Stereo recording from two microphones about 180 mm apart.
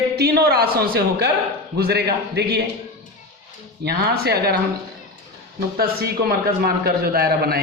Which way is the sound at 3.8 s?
60° right (ahead or behind).